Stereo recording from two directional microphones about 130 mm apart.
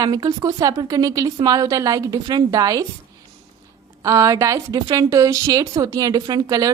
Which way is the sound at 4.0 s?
25° right (ahead or behind).